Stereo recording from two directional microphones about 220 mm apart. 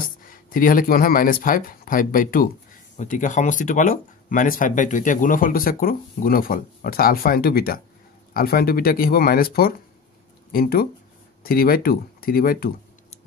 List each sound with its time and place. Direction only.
0.0 s speech: 40° left (ahead or behind)